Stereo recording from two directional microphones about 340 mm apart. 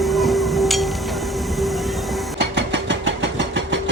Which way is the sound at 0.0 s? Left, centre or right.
Centre.